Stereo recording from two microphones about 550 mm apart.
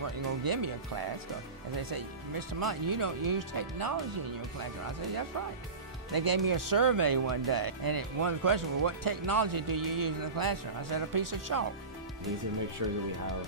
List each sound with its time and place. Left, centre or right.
0.4 s speech: right
1.8 s speech: right
6.1 s speech: right
12.8 s speech: right